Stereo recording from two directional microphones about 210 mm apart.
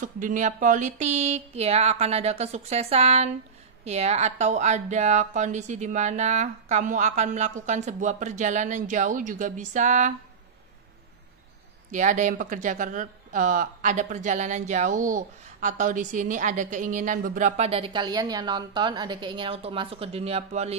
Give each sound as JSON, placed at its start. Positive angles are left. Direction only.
{"t": 0.0, "sound": "speech", "side_deg": -40}
{"t": 11.9, "sound": "speech", "side_deg": -35}